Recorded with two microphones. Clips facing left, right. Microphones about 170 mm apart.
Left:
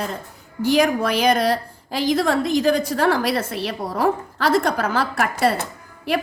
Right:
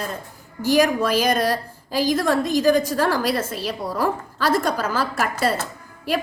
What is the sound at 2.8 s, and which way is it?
A woman's voice, 65° left (ahead or behind).